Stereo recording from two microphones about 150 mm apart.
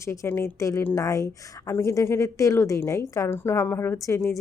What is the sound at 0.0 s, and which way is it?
A woman's voice, 20° left (ahead or behind).